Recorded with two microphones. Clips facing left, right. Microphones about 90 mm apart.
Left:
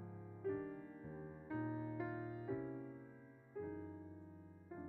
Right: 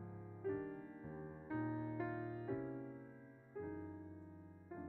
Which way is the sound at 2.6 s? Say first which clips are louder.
Right 1 dB; 35° right (ahead or behind).